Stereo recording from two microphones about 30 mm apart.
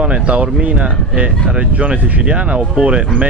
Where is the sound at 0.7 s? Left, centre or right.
Right.